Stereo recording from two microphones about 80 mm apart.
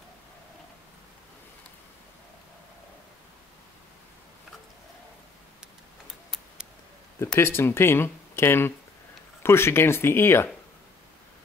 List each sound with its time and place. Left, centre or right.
7.3 s speech: left